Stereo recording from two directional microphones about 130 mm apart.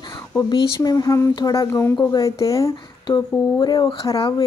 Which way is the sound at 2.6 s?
30° left (ahead or behind).